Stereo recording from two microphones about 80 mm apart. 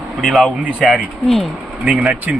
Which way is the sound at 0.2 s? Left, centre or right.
Centre.